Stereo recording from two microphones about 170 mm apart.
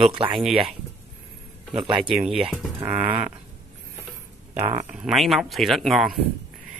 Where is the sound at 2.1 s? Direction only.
5° right (ahead or behind).